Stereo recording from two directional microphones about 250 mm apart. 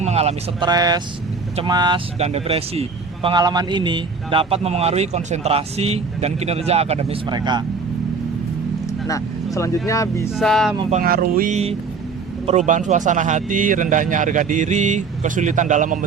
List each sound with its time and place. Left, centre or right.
0.0 s speech: right
9.0 s speech: centre
10.3 s music: centre
11.0 s speech: right